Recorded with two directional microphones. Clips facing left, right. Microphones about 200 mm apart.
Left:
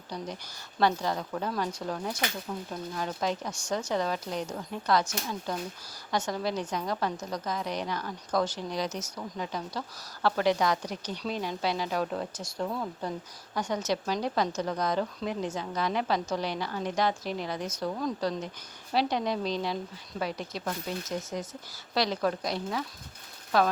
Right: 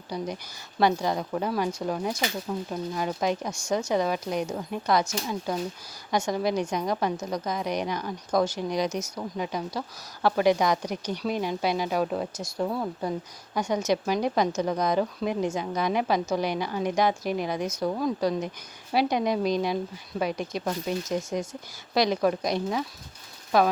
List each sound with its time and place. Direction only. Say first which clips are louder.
0.1 s a woman's voice: right 5 dB; 10° right (ahead or behind)